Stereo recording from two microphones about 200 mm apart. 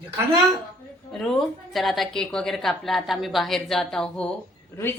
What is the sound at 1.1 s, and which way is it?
Speech, centre (ahead or behind).